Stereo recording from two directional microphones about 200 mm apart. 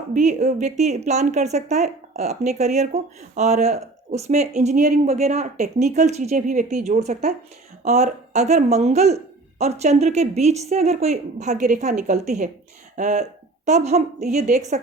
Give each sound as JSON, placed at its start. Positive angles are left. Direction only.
{"t": 0.1, "sound": "speech", "side_deg": -35}